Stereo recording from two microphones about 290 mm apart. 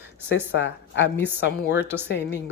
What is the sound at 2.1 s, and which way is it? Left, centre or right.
Speech, left.